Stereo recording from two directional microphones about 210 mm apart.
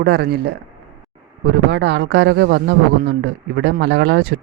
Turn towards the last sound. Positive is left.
turn(degrees=-55)  # may be behind; listen again after turning